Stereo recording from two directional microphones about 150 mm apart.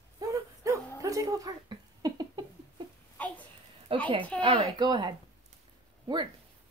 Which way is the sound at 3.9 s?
35° right (ahead or behind).